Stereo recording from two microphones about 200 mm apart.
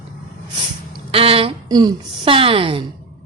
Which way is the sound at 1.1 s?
30° right (ahead or behind).